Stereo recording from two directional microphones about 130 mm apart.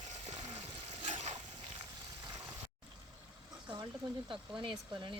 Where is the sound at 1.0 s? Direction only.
60° right (ahead or behind).